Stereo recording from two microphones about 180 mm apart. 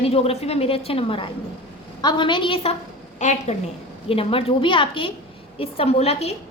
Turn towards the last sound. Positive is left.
turn(degrees=35)  # may be behind; listen again after turning